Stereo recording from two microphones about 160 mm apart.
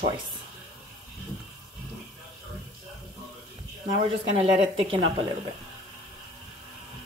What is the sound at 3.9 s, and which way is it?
A woman's voice, 35° right (ahead or behind).